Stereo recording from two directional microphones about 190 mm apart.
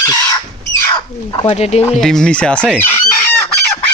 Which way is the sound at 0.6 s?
15° left (ahead or behind).